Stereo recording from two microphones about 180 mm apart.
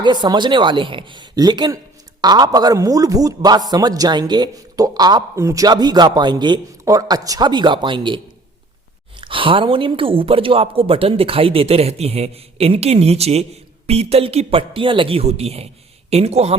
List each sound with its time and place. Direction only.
0.0 s speech: 25° right (ahead or behind)
9.2 s a woman's voice: 30° right (ahead or behind)